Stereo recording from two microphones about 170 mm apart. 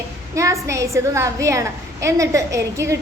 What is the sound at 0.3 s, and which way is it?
A woman's voice, 20° right (ahead or behind).